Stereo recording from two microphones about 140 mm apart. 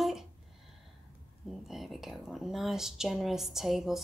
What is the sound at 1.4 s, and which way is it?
Speech, centre (ahead or behind).